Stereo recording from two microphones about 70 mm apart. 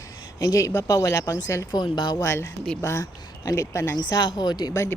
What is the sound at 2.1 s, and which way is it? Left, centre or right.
Speech, left.